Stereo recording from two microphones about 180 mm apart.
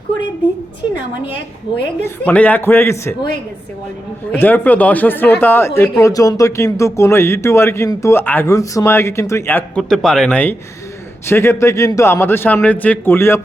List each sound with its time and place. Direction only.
2.0 s speech: 10° left (ahead or behind)
4.3 s speech: 10° left (ahead or behind)